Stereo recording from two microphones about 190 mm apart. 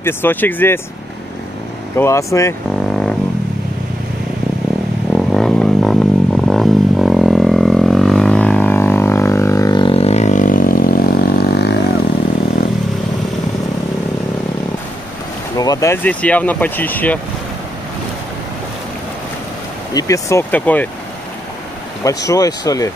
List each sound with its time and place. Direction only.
0.0 s speech: 10° left (ahead or behind)
2.0 s speech: 15° left (ahead or behind)
2.7 s vehicle: centre (ahead or behind)
5.1 s a sound: centre (ahead or behind); by 11.8 s 60° left (ahead or behind)
15.5 s speech: 20° left (ahead or behind)
19.9 s speech: 20° left (ahead or behind)
22.3 s speech: 20° left (ahead or behind)